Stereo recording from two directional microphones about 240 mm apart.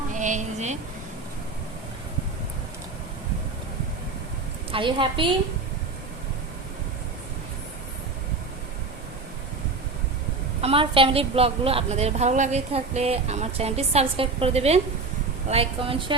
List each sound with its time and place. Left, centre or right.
0.1 s a sound: right
4.7 s a woman's voice: right
10.6 s a woman's voice: right